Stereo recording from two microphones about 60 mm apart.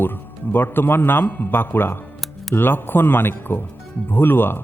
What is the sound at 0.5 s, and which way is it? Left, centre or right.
A man's voice, left.